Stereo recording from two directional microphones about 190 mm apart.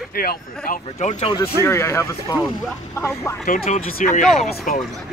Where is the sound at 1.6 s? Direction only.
15° left (ahead or behind).